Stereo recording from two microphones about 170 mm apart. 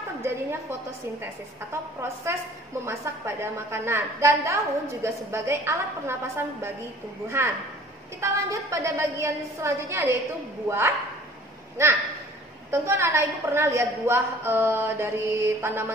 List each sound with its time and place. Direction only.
0.2 s a woman's voice: 15° right (ahead or behind)
11.8 s a woman's voice: 15° right (ahead or behind)